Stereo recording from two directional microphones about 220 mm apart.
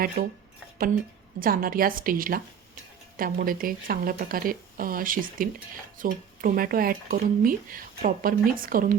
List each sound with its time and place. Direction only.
0.2 s speech: 40° right (ahead or behind)
1.4 s speech: 40° right (ahead or behind)